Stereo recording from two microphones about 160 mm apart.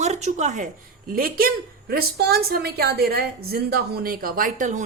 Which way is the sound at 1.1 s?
65° right (ahead or behind).